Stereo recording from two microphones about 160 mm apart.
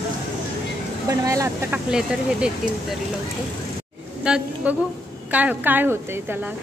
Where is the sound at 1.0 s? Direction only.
20° right (ahead or behind).